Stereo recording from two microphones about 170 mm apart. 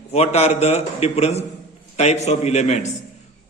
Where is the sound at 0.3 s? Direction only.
40° left (ahead or behind).